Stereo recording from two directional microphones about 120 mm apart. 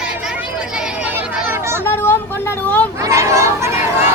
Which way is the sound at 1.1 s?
20° right (ahead or behind).